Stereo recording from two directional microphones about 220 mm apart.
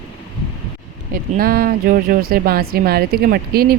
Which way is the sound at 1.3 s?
40° right (ahead or behind).